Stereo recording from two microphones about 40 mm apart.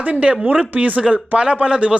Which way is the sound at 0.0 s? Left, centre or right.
Right.